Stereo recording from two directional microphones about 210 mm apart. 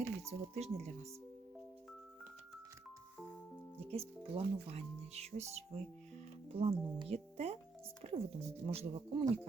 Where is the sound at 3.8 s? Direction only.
30° right (ahead or behind).